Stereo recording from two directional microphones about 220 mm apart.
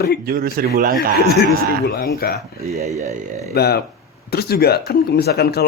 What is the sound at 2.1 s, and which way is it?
Speech, 45° left (ahead or behind).